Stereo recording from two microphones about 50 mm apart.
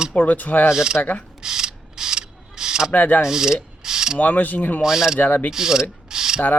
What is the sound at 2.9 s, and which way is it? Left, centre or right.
Speech, left.